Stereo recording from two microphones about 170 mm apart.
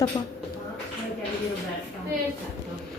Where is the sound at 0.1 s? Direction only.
20° left (ahead or behind).